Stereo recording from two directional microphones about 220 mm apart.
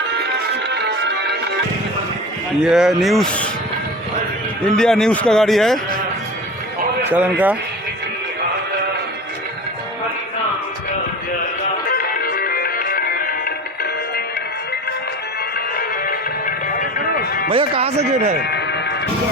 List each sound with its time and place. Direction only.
2.6 s speech: 5° right (ahead or behind)
4.8 s speech: centre (ahead or behind)
7.1 s speech: 5° right (ahead or behind)
11.9 s music: 40° left (ahead or behind)
15.5 s music: 40° left (ahead or behind)
17.5 s speech: 25° right (ahead or behind)
18.4 s music: 50° left (ahead or behind)